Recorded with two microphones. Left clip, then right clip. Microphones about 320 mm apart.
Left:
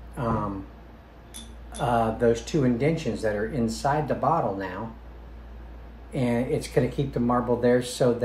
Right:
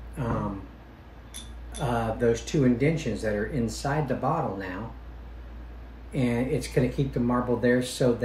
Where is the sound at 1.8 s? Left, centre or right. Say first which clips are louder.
Left 3 dB; centre.